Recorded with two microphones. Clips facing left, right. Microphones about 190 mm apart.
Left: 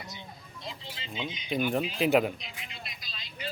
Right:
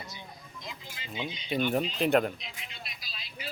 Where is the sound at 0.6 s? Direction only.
25° left (ahead or behind).